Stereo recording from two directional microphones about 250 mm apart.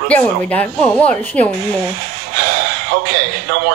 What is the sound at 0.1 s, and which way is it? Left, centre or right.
Speech, centre.